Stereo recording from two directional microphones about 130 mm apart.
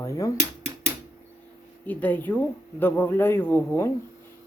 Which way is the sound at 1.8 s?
15° left (ahead or behind).